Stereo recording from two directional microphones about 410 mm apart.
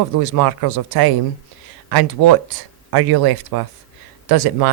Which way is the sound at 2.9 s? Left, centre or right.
Right.